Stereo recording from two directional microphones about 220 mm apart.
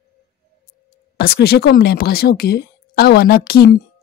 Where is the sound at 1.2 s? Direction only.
45° left (ahead or behind).